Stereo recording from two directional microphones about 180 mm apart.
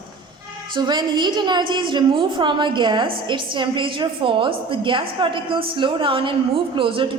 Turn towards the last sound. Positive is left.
turn(degrees=-30)  # may be behind; listen again after turning